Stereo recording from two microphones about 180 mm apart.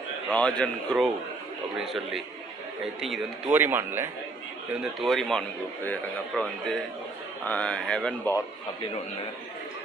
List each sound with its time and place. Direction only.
0.3 s speech: 5° left (ahead or behind); by 4.1 s 10° right (ahead or behind)
4.8 s a man's voice: centre (ahead or behind)